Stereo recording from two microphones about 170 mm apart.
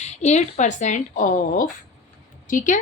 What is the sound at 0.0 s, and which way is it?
A woman's voice, 40° left (ahead or behind).